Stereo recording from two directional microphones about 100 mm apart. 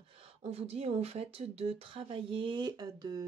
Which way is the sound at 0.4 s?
90° right.